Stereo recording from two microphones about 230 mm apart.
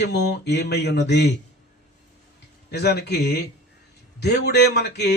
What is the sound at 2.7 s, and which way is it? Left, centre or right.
Speech, left.